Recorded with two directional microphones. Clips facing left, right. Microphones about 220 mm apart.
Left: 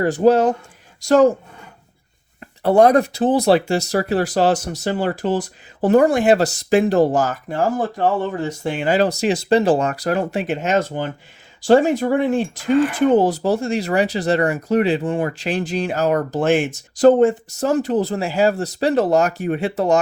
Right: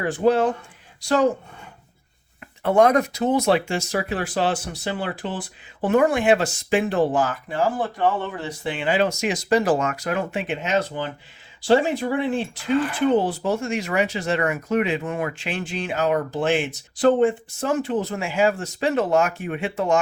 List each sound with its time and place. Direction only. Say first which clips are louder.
0.0 s speech: left 5 dB; 40° left (ahead or behind)
2.6 s speech: left 4 dB; 35° left (ahead or behind)